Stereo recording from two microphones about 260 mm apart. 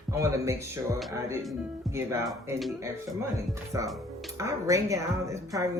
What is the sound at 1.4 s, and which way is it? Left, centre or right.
Speech, centre.